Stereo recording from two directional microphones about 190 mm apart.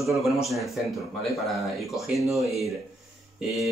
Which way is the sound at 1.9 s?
Centre (ahead or behind).